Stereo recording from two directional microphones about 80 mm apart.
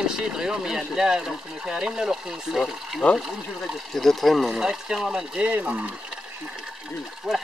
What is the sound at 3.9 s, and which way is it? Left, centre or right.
Speech, centre.